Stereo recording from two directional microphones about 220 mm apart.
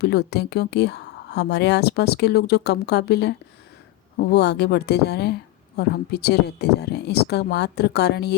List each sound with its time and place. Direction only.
0.0 s speech: 45° left (ahead or behind)